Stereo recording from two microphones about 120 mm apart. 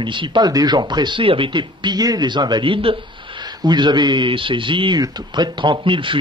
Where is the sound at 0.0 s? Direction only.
40° right (ahead or behind).